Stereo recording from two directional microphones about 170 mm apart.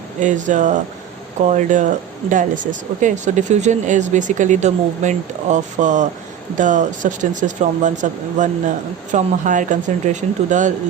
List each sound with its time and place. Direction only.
0.2 s speech: 45° right (ahead or behind)